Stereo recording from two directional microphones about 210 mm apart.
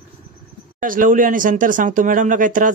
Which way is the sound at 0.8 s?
40° right (ahead or behind).